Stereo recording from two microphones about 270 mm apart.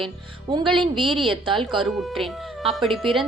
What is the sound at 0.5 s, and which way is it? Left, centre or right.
Speech, centre.